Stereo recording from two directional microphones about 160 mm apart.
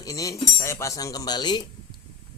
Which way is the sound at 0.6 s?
15° left (ahead or behind).